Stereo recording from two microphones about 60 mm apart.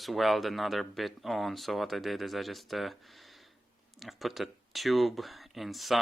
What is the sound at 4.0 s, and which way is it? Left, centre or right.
Cutlery, centre.